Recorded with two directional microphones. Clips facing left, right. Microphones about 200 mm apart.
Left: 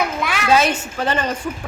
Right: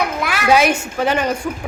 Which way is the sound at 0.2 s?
10° right (ahead or behind).